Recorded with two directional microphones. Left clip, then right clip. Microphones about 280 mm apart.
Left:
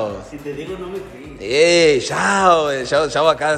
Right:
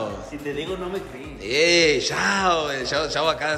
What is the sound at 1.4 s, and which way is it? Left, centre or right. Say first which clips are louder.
Speech: left 5 dB; centre.